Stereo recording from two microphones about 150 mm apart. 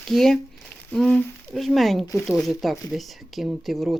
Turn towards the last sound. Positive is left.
turn(degrees=0)  # may be behind; listen again after turning